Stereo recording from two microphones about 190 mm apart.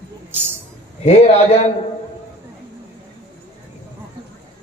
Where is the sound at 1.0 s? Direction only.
35° left (ahead or behind).